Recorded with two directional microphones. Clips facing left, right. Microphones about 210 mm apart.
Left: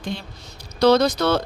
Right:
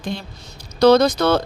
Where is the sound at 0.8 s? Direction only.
50° right (ahead or behind).